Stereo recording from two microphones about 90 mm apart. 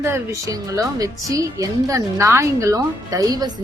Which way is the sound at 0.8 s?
40° right (ahead or behind).